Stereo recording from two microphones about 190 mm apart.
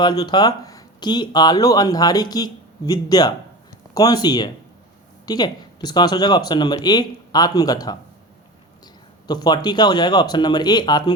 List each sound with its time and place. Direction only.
0.0 s speech: 20° left (ahead or behind)
9.2 s speech: 20° left (ahead or behind)